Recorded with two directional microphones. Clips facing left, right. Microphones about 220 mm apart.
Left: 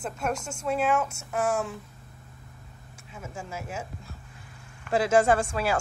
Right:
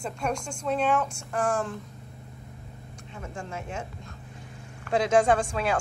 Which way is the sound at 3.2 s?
5° left (ahead or behind).